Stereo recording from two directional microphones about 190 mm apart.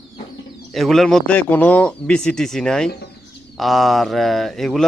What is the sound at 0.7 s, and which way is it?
Speech, centre (ahead or behind).